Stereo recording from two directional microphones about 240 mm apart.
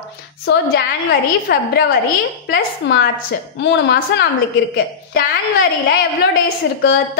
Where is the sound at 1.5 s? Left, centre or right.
Left.